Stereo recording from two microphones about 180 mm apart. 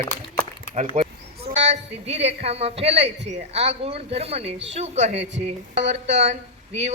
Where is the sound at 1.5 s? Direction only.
35° right (ahead or behind).